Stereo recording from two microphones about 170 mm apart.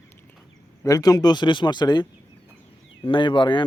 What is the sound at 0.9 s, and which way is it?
Speech, 20° left (ahead or behind).